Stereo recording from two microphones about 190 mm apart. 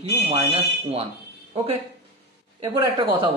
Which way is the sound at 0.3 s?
30° right (ahead or behind).